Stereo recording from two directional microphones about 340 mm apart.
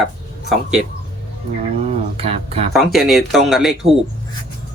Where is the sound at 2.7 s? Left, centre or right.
Centre.